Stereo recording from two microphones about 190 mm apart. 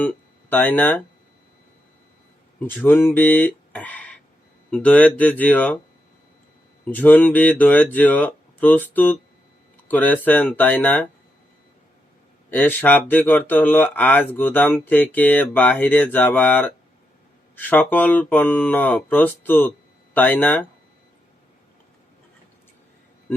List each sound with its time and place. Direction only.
0.0 s speech: 10° left (ahead or behind)
2.6 s speech: 10° left (ahead or behind)
6.8 s speech: 10° left (ahead or behind)
12.5 s speech: 10° left (ahead or behind)